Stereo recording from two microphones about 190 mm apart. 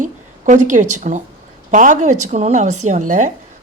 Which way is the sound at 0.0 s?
40° right (ahead or behind).